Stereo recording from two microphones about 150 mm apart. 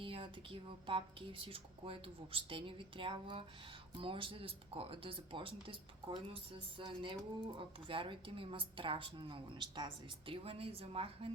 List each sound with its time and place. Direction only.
0.0 s speech: 35° right (ahead or behind)